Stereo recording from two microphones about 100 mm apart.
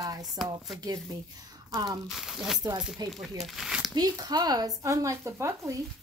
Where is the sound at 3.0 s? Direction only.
45° right (ahead or behind).